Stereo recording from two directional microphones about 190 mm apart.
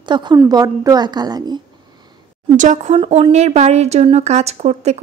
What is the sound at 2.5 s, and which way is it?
Speech, 40° right (ahead or behind).